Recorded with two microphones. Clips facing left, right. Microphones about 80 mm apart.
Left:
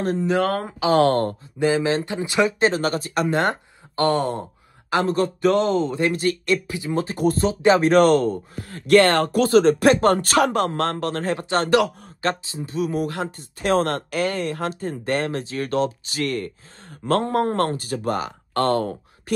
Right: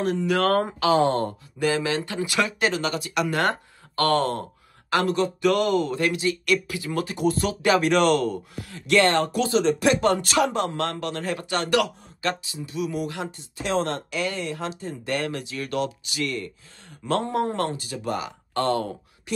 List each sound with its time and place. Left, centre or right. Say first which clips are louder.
0.0 s speech: left 2 dB; left
0.4 s speech: right 1 dB; centre
0.9 s speech: left 5 dB; left
1.6 s speech: left 4 dB; left
2.7 s speech: left 3 dB; left
3.3 s speech: left 2 dB; left
5.1 s speech: left 2 dB; left
5.5 s speech: left 2 dB; left
8.7 s speech: left 4 dB; left
15.1 s speech: left 2 dB; left